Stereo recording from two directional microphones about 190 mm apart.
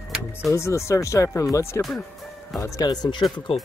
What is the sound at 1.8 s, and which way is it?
Speech, centre (ahead or behind).